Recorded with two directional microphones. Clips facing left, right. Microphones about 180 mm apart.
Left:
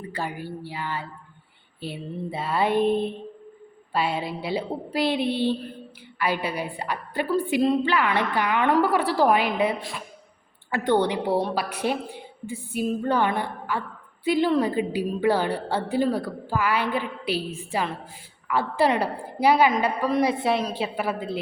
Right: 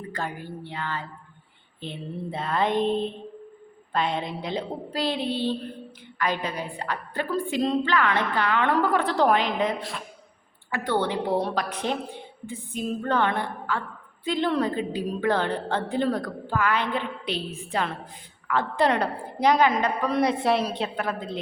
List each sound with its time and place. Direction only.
0.1 s a woman's voice: 10° left (ahead or behind)
10.7 s a woman's voice: 30° left (ahead or behind)
10.9 s a woman's voice: 15° left (ahead or behind)